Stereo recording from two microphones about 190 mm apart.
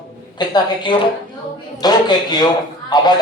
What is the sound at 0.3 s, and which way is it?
A man's voice, 25° left (ahead or behind).